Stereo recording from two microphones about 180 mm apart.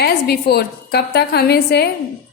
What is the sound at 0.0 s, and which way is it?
A woman's voice, 65° left (ahead or behind).